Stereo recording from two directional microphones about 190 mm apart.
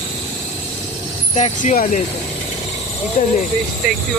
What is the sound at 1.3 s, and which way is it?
Speech, 40° left (ahead or behind).